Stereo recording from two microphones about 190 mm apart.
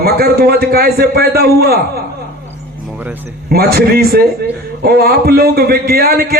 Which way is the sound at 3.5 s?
55° right (ahead or behind).